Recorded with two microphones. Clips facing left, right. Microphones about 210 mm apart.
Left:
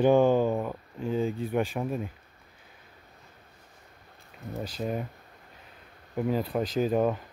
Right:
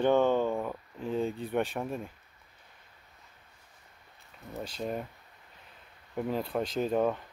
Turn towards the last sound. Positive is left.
turn(degrees=5)  # may be behind; listen again after turning